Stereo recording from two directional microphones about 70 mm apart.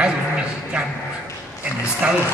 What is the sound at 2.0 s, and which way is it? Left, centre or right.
Speech, centre.